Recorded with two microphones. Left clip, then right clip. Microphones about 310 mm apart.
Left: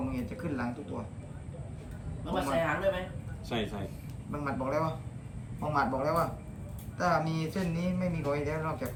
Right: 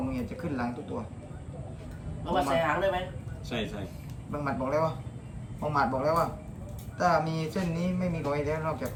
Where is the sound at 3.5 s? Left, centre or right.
Left.